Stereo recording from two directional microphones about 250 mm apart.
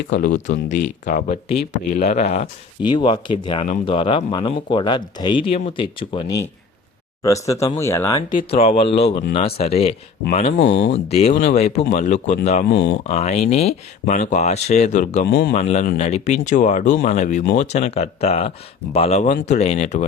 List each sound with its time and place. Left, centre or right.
0.1 s speech: left
7.4 s speech: centre
8.3 s speech: left
10.6 s speech: left
10.9 s speech: left
15.5 s speech: left